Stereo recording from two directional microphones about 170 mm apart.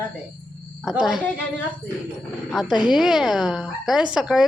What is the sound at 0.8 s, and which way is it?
Speech, centre (ahead or behind).